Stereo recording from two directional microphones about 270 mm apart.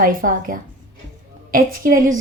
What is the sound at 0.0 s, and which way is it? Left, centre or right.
A woman's voice, right.